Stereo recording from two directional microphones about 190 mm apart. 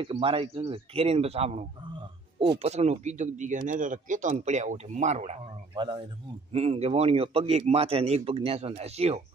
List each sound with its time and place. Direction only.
0.0 s a man's voice: 30° right (ahead or behind)
5.8 s a man's voice: 25° right (ahead or behind)